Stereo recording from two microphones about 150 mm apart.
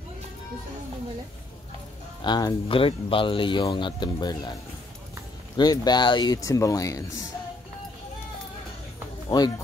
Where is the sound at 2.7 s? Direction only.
35° left (ahead or behind).